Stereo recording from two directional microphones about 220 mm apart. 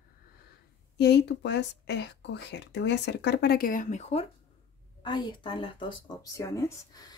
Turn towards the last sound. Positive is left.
turn(degrees=15)  # may be behind; listen again after turning